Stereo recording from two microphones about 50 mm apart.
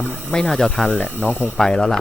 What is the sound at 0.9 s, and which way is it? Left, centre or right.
Speech, left.